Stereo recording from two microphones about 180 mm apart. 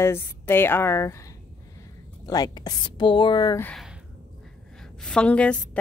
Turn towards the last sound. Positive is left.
turn(degrees=5)  # may be behind; listen again after turning